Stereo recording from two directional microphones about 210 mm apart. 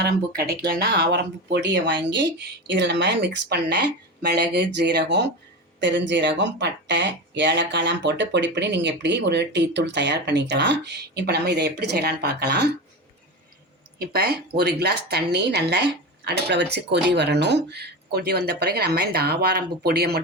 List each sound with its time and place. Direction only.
0.0 s speech: 50° right (ahead or behind)
14.0 s speech: 45° right (ahead or behind)